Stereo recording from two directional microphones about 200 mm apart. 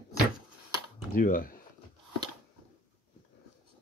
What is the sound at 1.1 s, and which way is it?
Speech, 45° left (ahead or behind).